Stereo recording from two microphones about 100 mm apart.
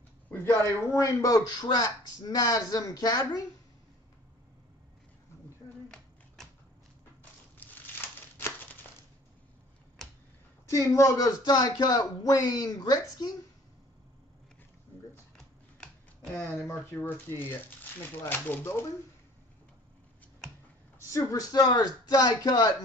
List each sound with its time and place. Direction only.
0.3 s a sound: 25° left (ahead or behind)
0.7 s speech: 35° left (ahead or behind)
5.9 s a sound: 5° left (ahead or behind)
7.5 s crushing: 20° left (ahead or behind)
10.7 s speech: 30° left (ahead or behind)
16.3 s speech: 25° left (ahead or behind)
21.1 s speech: 35° left (ahead or behind)